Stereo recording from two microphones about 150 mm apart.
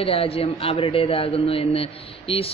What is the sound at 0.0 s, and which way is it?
A man's voice, 40° left (ahead or behind).